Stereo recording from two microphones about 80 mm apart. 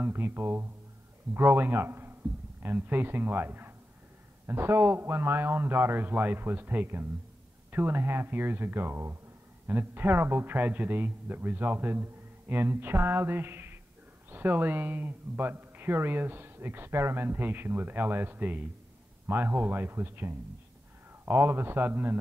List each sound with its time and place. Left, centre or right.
0.0 s speech: right